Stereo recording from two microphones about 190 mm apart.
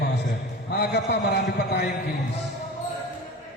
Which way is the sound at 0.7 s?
60° left (ahead or behind).